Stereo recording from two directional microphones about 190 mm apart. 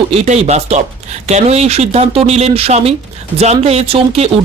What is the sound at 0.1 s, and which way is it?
Speech, 35° right (ahead or behind).